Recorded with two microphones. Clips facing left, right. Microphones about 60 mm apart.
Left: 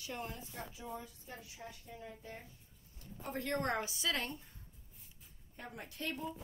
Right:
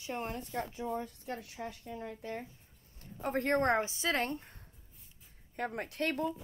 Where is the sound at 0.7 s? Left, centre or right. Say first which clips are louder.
Right 9 dB; right.